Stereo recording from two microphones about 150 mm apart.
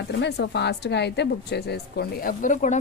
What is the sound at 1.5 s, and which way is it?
Speech, 90° left.